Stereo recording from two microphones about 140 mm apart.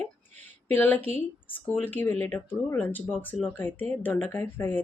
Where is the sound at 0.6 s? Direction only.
15° left (ahead or behind).